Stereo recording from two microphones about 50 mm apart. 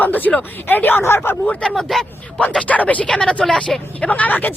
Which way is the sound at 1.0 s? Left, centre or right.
Left.